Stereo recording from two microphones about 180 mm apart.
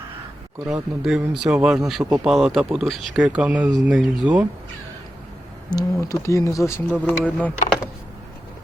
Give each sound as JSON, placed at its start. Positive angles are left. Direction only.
{"t": 0.7, "sound": "speech", "side_deg": -5}
{"t": 5.7, "sound": "speech", "side_deg": 15}